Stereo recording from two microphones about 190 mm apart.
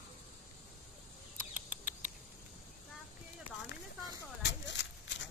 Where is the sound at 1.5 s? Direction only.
10° right (ahead or behind).